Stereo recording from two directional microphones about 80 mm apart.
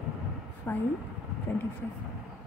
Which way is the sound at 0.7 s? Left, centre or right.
Left.